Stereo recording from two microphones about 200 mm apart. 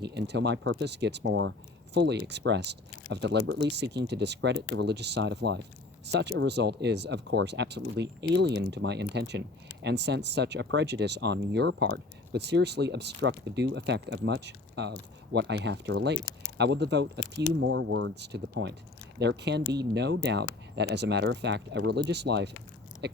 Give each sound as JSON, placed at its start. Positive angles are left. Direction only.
{"t": 0.0, "sound": "speech", "side_deg": -55}
{"t": 17.6, "sound": "speech", "side_deg": -75}
{"t": 23.0, "sound": "a sound", "side_deg": -60}